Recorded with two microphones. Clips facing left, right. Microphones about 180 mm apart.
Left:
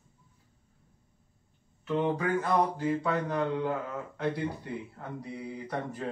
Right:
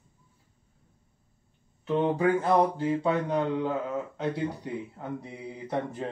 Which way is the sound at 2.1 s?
25° right (ahead or behind).